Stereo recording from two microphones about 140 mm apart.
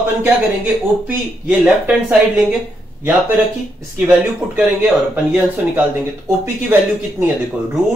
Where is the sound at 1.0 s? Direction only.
10° right (ahead or behind).